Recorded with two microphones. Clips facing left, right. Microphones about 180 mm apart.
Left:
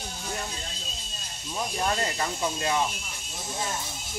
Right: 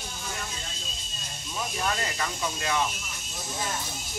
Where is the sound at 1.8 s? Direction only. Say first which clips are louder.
Left 2 dB; 30° left (ahead or behind).